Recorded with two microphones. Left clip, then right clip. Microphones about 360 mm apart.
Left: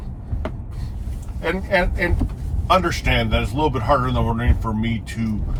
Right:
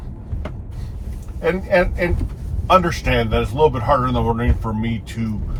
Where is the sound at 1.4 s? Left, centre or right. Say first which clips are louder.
Right 3 dB; centre.